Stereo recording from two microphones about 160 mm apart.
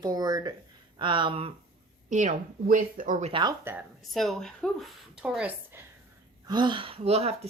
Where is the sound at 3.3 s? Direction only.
30° right (ahead or behind).